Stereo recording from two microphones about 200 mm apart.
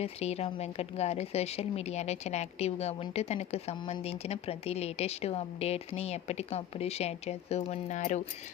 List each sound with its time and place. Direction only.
0.0 s a woman's voice: 30° left (ahead or behind)